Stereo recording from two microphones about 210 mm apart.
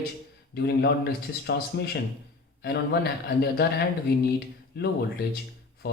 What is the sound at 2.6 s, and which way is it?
A man's voice, 50° left (ahead or behind).